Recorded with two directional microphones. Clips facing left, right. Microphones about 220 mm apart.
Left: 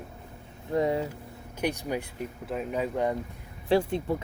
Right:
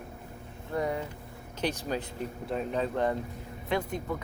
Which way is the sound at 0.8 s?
25° left (ahead or behind).